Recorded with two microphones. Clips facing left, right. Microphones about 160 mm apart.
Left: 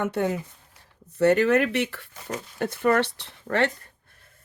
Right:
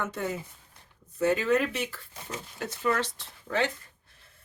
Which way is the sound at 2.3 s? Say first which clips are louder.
Left 7 dB; 55° left (ahead or behind).